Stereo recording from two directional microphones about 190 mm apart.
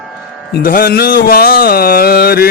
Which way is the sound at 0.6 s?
50° left (ahead or behind).